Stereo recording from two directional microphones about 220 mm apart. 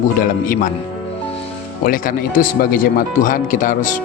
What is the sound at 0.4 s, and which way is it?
Speech, 40° left (ahead or behind).